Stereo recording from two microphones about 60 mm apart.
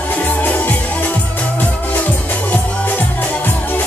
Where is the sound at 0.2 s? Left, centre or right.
Left.